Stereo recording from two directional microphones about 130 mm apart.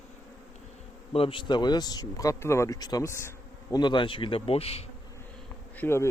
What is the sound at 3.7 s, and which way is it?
Speech, 35° left (ahead or behind).